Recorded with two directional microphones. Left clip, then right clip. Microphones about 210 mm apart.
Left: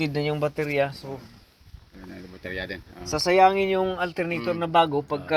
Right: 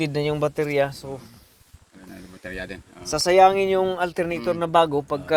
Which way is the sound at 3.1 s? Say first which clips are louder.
Right 3 dB; 25° right (ahead or behind).